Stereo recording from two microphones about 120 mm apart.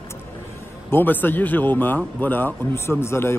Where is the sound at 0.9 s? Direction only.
15° left (ahead or behind).